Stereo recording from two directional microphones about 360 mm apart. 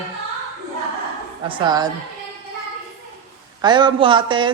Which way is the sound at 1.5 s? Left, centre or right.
Centre.